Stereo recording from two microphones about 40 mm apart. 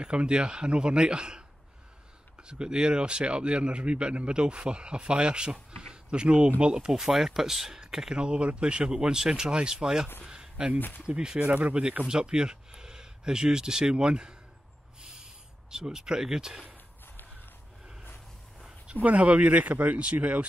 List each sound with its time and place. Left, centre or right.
0.0 s a man's voice: right
2.4 s a man's voice: right
6.9 s speech: centre
8.2 s a man's voice: right
10.2 s a sound: centre
11.0 s a man's voice: centre
11.4 s speech: right
12.1 s speech: right
15.0 s a sound: right
16.7 s a sound: left
19.0 s speech: right